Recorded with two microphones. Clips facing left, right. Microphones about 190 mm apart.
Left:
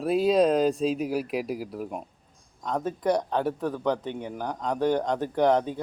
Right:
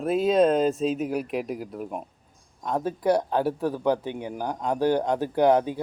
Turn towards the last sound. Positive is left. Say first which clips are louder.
# right 2 dB
turn(degrees=-10)  # may be behind; listen again after turning